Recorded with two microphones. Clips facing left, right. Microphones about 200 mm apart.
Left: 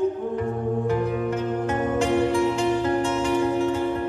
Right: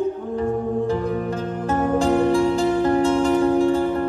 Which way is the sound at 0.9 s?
35° right (ahead or behind).